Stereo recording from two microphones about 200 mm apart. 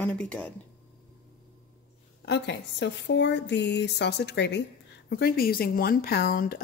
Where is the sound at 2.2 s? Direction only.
60° left (ahead or behind).